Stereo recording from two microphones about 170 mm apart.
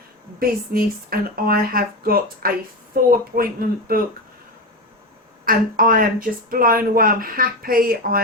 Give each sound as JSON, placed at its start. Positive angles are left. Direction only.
{"t": 0.3, "sound": "speech", "side_deg": -60}
{"t": 5.5, "sound": "speech", "side_deg": -55}